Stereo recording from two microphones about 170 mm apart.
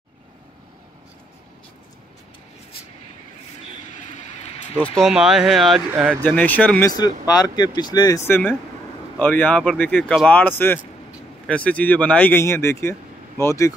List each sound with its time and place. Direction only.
4.7 s speech: 5° left (ahead or behind)
6.2 s speech: 10° left (ahead or behind)
7.0 s speech: 20° left (ahead or behind)
9.2 s speech: 10° left (ahead or behind)